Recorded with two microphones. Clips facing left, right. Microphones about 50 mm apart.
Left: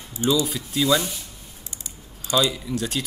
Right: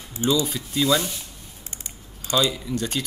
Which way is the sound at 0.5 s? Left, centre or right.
Centre.